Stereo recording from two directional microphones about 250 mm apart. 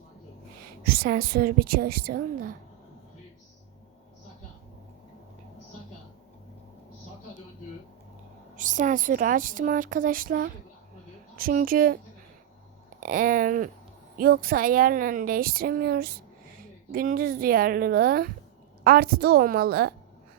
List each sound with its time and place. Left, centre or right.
0.9 s a woman's voice: right
8.5 s a woman's voice: right
13.0 s a woman's voice: right